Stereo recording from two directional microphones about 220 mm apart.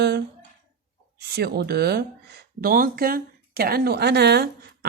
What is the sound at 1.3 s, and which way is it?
Speech, 45° right (ahead or behind).